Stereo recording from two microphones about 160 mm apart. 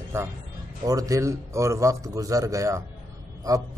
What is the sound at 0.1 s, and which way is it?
A man's voice, 15° right (ahead or behind).